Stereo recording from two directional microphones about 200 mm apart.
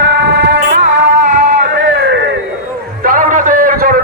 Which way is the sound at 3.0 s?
45° right (ahead or behind).